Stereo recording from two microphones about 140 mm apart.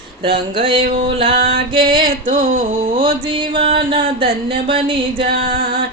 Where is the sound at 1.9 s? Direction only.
75° right (ahead or behind).